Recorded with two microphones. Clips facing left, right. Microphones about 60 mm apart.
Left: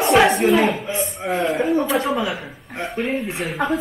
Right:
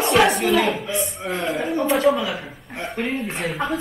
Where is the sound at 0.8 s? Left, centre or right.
Left.